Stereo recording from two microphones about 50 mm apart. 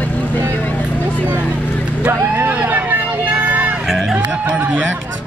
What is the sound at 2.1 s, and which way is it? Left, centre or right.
Vehicle, right.